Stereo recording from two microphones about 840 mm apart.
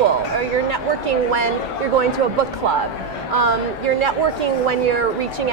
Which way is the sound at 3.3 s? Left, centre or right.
Right.